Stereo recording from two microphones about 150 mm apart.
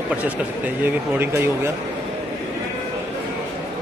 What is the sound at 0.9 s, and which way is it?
Speech, 15° right (ahead or behind).